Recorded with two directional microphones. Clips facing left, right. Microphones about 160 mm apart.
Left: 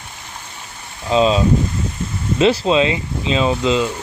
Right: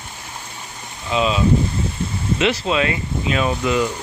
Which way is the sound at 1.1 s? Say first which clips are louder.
Left 3 dB; 30° left (ahead or behind).